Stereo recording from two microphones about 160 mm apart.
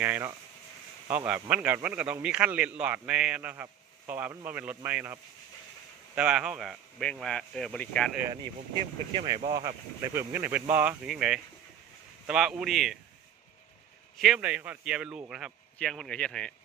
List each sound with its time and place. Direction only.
0.0 s a man's voice: 10° right (ahead or behind); by 8.1 s 5° left (ahead or behind)
9.1 s speech: 30° right (ahead or behind)
10.2 s a man's voice: 10° right (ahead or behind)
14.2 s a man's voice: 5° right (ahead or behind)